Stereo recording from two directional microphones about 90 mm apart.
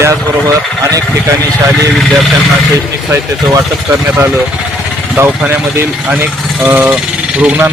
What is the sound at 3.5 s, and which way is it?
Speech, 35° right (ahead or behind).